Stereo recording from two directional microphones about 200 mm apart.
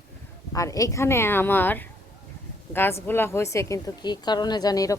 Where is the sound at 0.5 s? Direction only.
15° left (ahead or behind).